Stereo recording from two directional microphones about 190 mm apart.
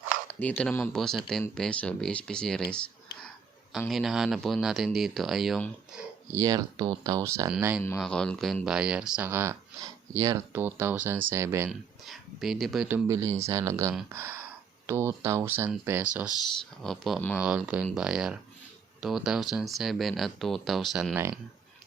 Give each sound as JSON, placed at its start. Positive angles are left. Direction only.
{"t": 0.3, "sound": "speech", "side_deg": 10}
{"t": 6.3, "sound": "speech", "side_deg": -20}
{"t": 7.9, "sound": "speech", "side_deg": 5}
{"t": 11.7, "sound": "speech", "side_deg": 0}
{"t": 13.1, "sound": "speech", "side_deg": -15}
{"t": 16.8, "sound": "speech", "side_deg": 0}
{"t": 17.3, "sound": "speech", "side_deg": -5}